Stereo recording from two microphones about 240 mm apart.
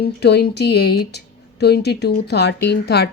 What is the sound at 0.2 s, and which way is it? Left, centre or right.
Speech, left.